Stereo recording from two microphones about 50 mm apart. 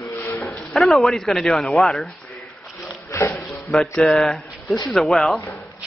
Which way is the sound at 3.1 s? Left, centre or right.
Left.